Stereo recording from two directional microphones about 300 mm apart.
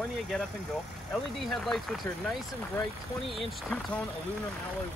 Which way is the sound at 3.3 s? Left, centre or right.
Centre.